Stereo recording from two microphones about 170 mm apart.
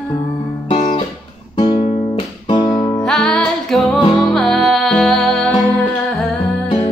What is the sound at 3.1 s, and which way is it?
Music, 5° left (ahead or behind).